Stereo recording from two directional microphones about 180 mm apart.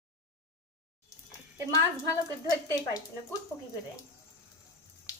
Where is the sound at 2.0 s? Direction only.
20° left (ahead or behind).